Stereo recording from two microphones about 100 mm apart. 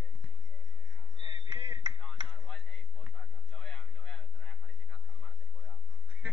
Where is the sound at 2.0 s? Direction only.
10° left (ahead or behind).